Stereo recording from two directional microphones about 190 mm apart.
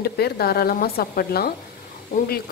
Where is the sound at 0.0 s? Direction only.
55° left (ahead or behind).